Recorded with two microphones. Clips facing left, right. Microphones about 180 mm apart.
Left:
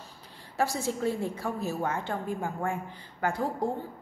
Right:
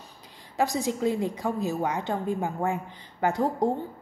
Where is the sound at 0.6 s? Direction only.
15° right (ahead or behind).